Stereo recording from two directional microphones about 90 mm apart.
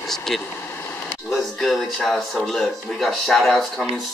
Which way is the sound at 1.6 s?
5° left (ahead or behind).